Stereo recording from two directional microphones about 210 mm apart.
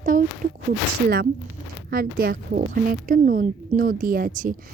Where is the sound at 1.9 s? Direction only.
45° right (ahead or behind).